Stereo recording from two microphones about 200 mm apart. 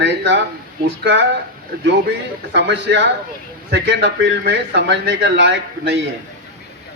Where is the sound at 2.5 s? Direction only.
60° right (ahead or behind).